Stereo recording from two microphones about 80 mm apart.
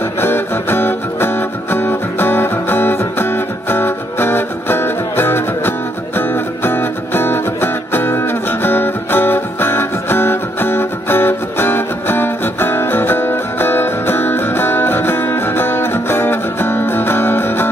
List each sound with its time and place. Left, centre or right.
0.2 s music: left